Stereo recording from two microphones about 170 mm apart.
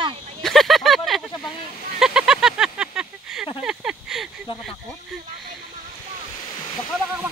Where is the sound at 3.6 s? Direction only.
5° right (ahead or behind).